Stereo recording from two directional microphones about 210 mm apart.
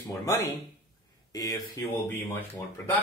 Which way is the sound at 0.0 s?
15° left (ahead or behind).